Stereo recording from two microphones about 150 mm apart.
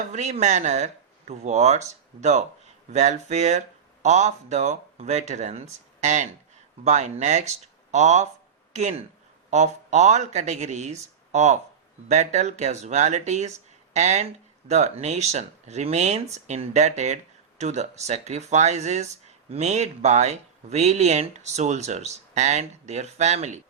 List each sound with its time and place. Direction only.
0.1 s speech: 50° right (ahead or behind)